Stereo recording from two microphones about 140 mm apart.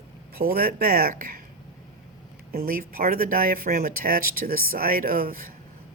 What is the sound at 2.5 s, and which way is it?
Speech, 90° right.